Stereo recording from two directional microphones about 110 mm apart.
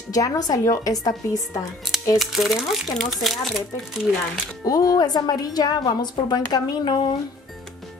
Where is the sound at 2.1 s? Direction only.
Centre (ahead or behind).